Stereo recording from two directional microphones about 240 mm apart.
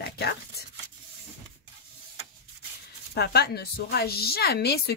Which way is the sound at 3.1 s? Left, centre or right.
Left.